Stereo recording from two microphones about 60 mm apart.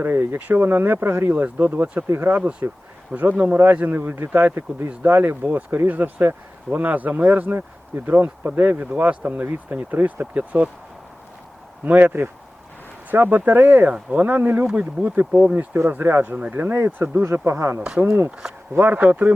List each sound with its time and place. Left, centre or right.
0.0 s speech: right
0.3 s speech: right
1.3 s speech: right
2.4 s speech: right
11.9 s speech: right
15.3 s speech: centre
15.5 s speech: right
17.4 s speech: right
17.7 s speech: centre
18.0 s speech: right